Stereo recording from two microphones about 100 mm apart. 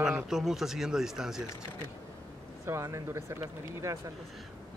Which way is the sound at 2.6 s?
30° right (ahead or behind).